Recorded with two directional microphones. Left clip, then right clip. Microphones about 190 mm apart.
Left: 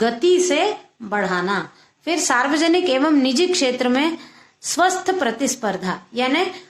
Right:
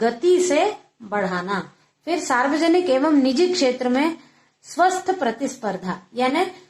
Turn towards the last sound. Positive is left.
turn(degrees=30)  # may be behind; listen again after turning